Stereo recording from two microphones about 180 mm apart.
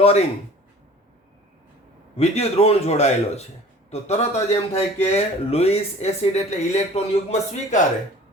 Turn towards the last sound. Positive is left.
turn(degrees=40)  # may be behind; listen again after turning